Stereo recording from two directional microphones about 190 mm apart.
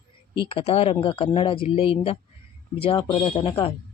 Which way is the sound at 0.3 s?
25° left (ahead or behind).